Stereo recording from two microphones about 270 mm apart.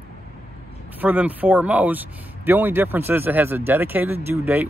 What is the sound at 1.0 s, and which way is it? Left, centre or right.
Speech, centre.